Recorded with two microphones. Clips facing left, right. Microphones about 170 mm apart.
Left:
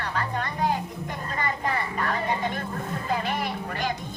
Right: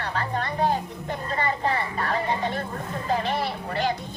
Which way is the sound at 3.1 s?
35° right (ahead or behind).